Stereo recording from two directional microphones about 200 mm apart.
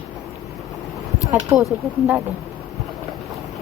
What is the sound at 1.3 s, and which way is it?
Speech, 20° right (ahead or behind).